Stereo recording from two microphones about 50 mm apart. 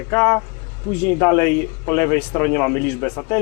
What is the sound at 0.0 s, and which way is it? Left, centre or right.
Speech, left.